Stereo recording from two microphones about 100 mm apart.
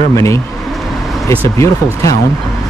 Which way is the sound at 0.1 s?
30° left (ahead or behind).